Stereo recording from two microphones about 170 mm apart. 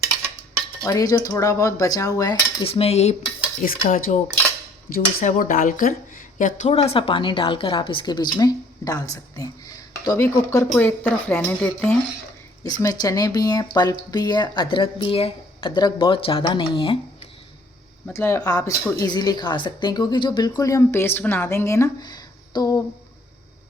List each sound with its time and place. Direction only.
0.8 s speech: 20° left (ahead or behind)
2.6 s cutlery: 35° left (ahead or behind)
3.6 s speech: 55° left (ahead or behind); by 11.9 s 5° left (ahead or behind)
12.6 s speech: 20° left (ahead or behind)
18.1 s speech: 15° left (ahead or behind)